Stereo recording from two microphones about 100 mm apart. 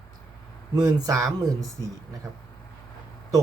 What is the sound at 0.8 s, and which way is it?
Speech, 35° right (ahead or behind).